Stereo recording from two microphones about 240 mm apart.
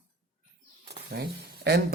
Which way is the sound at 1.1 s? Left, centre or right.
Right.